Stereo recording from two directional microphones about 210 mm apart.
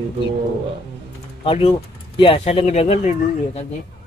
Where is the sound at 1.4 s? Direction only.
25° left (ahead or behind).